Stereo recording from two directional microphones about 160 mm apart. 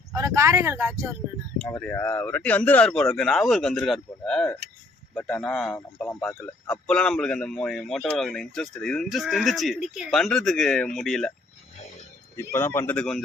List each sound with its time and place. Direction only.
0.1 s speech: 20° right (ahead or behind)
1.5 s speech: 5° left (ahead or behind)
12.4 s speech: 15° left (ahead or behind)